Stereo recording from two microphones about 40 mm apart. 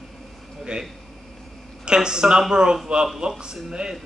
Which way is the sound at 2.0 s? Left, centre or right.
Centre.